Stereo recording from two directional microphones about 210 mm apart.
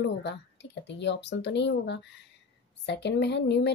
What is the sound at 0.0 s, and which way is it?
A woman's voice, 55° left (ahead or behind).